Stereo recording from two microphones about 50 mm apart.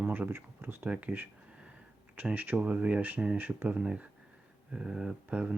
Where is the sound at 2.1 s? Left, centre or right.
Right.